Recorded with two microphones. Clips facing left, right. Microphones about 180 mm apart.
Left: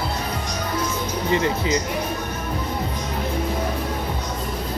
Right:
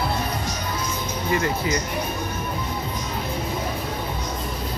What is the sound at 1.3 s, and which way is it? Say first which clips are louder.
Speech: left 2 dB; 25° left (ahead or behind).